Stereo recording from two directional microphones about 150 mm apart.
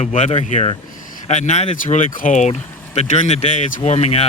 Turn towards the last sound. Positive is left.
turn(degrees=45)  # may be behind; listen again after turning